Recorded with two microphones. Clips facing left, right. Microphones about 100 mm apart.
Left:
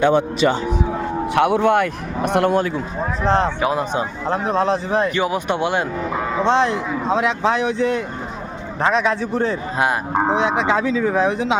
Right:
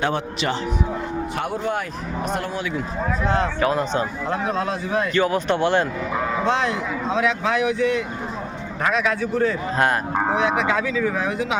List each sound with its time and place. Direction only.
1.4 s a man's voice: 75° left (ahead or behind)
3.2 s speech: 30° left (ahead or behind)
3.6 s speech: 15° left (ahead or behind)
4.3 s speech: 30° left (ahead or behind)
5.1 s speech: 15° left (ahead or behind)
6.4 s speech: 30° left (ahead or behind)
9.7 s speech: 10° left (ahead or behind)